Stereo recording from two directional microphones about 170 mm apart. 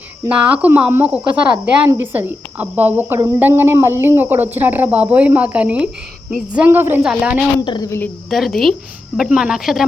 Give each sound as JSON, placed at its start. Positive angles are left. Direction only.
{"t": 0.3, "sound": "speech", "side_deg": -10}
{"t": 7.6, "sound": "a woman's voice", "side_deg": 25}
{"t": 8.3, "sound": "speech", "side_deg": 0}